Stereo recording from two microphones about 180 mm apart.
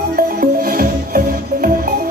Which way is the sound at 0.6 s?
55° right (ahead or behind).